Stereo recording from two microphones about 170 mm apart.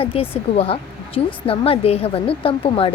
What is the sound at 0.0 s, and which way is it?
A woman's voice, 35° left (ahead or behind).